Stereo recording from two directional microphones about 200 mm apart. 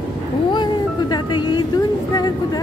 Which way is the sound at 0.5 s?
20° left (ahead or behind).